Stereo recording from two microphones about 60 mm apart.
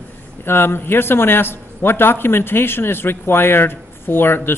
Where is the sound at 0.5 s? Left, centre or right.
Left.